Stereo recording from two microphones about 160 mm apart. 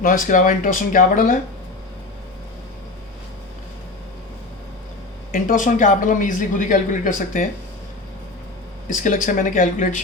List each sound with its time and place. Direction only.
0.0 s speech: 60° left (ahead or behind)
5.3 s speech: 55° left (ahead or behind)
9.0 s speech: 55° left (ahead or behind)